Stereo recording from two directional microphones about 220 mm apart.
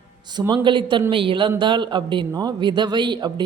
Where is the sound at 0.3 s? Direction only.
20° right (ahead or behind).